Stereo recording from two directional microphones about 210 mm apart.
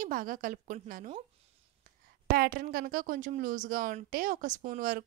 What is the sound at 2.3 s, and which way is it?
Speech, 45° right (ahead or behind).